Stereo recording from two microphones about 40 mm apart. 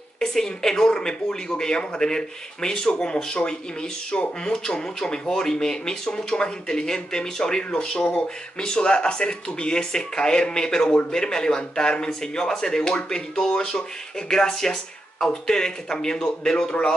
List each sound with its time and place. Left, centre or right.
0.2 s speech: centre